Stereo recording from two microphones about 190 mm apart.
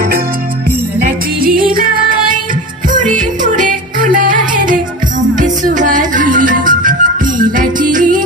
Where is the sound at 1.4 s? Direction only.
50° right (ahead or behind).